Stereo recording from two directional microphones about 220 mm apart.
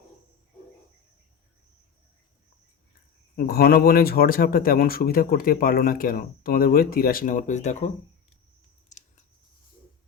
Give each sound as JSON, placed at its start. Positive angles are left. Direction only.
{"t": 3.3, "sound": "speech", "side_deg": 45}
{"t": 8.9, "sound": "scissors", "side_deg": 35}